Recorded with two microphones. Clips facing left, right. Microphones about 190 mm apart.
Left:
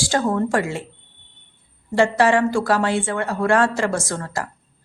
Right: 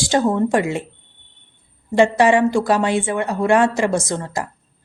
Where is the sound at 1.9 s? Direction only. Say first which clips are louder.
Right 3 dB; 20° right (ahead or behind).